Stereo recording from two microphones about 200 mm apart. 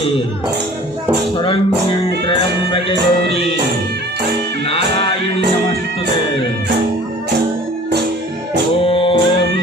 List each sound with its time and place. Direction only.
2.9 s music: 55° right (ahead or behind)
8.8 s music: 25° left (ahead or behind)